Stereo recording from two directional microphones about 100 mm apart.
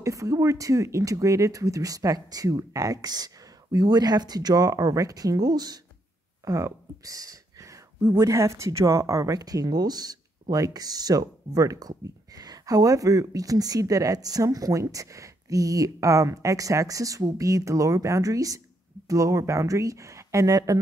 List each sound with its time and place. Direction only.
0.0 s speech: 35° right (ahead or behind)